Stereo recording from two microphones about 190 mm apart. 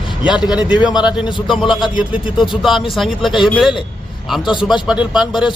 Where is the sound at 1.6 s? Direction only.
25° left (ahead or behind).